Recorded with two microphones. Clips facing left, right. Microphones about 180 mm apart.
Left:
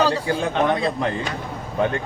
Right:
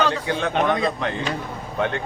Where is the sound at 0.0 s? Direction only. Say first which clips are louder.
Left 2 dB; 35° left (ahead or behind).